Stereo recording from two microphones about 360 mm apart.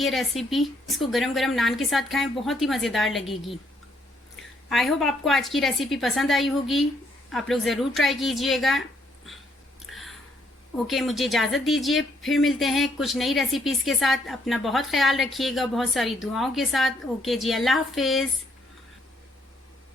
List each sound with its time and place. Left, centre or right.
0.0 s speech: centre
4.7 s speech: centre
9.8 s a sound: centre
10.8 s speech: centre